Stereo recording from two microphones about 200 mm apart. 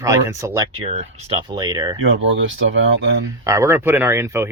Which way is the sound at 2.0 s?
75° right (ahead or behind).